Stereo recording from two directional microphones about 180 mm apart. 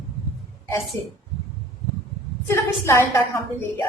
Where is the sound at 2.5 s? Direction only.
15° left (ahead or behind).